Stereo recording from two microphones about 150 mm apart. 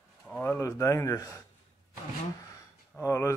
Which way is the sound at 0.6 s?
20° left (ahead or behind).